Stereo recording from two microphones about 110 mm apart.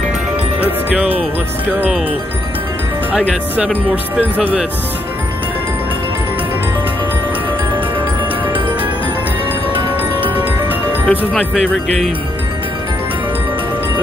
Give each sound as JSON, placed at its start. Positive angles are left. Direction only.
{"t": 0.6, "sound": "speech", "side_deg": -15}
{"t": 3.1, "sound": "speech", "side_deg": -10}
{"t": 9.8, "sound": "music", "side_deg": -50}
{"t": 11.1, "sound": "speech", "side_deg": 0}